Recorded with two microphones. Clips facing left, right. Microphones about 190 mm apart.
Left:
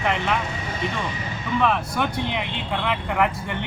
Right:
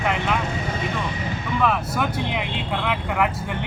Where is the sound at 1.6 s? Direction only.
5° right (ahead or behind).